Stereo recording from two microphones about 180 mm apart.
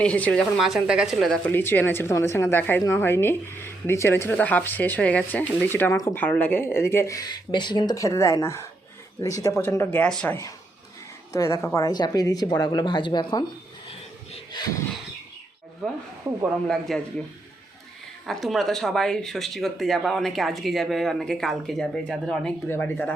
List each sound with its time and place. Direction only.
0.0 s speech: 5° left (ahead or behind)
1.5 s a woman's voice: 10° left (ahead or behind)
14.3 s a sound: 25° left (ahead or behind)
15.8 s speech: centre (ahead or behind)
18.3 s speech: centre (ahead or behind)